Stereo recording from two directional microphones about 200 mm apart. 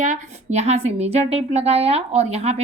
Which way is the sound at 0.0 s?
35° right (ahead or behind).